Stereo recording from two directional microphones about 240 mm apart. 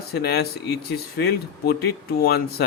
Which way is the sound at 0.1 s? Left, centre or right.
Left.